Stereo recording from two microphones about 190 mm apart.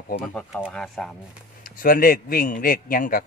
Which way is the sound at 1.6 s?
45° left (ahead or behind).